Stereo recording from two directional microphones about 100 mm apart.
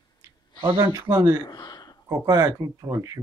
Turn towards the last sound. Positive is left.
turn(degrees=-30)  # may be behind; listen again after turning